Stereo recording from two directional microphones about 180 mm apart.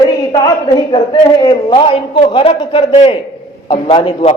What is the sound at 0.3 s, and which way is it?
A woman's voice, 25° left (ahead or behind).